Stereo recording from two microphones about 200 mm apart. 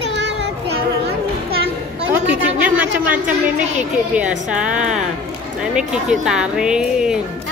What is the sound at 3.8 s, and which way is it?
Speech, 5° right (ahead or behind).